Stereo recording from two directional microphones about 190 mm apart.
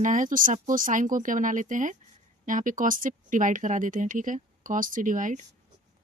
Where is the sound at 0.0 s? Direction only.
45° right (ahead or behind).